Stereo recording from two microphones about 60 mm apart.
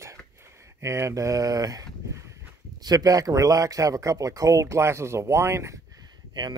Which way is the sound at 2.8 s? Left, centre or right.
Right.